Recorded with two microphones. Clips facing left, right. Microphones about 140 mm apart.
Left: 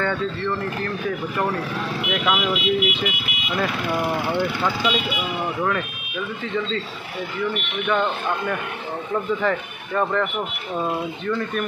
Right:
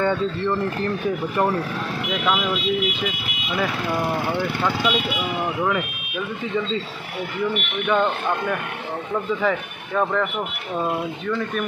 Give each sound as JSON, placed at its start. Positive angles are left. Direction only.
{"t": 0.0, "sound": "speech", "side_deg": -15}
{"t": 2.0, "sound": "speech", "side_deg": 0}
{"t": 5.6, "sound": "speech", "side_deg": -10}
{"t": 7.8, "sound": "speech", "side_deg": -5}